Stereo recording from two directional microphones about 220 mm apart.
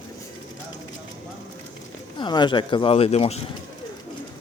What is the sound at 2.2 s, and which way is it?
Speech, 20° left (ahead or behind).